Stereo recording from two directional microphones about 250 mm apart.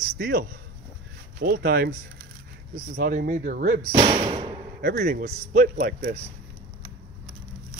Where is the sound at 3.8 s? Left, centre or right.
Right.